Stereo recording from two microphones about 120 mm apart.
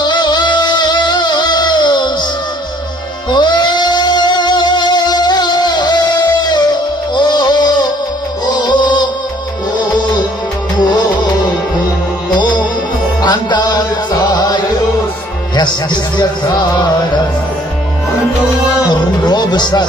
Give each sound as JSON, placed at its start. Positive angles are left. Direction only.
{"t": 0.0, "sound": "music", "side_deg": 35}
{"t": 3.2, "sound": "music", "side_deg": 40}
{"t": 10.8, "sound": "music", "side_deg": 35}
{"t": 12.3, "sound": "music", "side_deg": 35}
{"t": 16.1, "sound": "music", "side_deg": 35}
{"t": 18.9, "sound": "music", "side_deg": 35}